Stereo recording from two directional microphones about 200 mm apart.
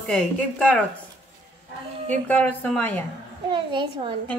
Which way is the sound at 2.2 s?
5° left (ahead or behind).